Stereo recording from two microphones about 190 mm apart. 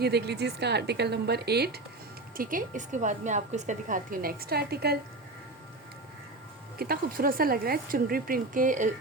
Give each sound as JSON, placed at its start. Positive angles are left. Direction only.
{"t": 0.0, "sound": "a woman's voice", "side_deg": -60}
{"t": 2.3, "sound": "a woman's voice", "side_deg": -45}
{"t": 6.7, "sound": "a woman's voice", "side_deg": -50}